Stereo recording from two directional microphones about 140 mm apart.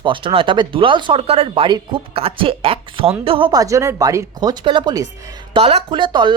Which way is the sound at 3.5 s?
25° right (ahead or behind).